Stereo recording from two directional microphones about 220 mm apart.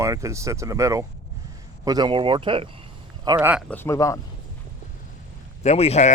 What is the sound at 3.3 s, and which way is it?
Speech, 5° right (ahead or behind).